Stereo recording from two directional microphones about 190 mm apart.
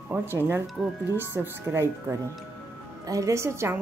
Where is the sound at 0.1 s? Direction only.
10° right (ahead or behind).